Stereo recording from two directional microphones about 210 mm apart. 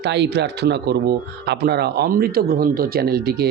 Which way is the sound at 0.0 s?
55° right (ahead or behind).